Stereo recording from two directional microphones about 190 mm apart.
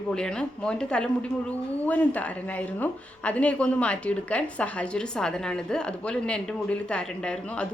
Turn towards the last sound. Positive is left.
turn(degrees=5)  # may be behind; listen again after turning